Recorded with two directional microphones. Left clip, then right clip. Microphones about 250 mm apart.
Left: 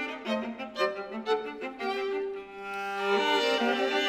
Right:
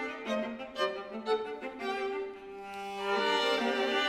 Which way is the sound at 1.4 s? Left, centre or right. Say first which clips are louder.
Left 2 dB; left.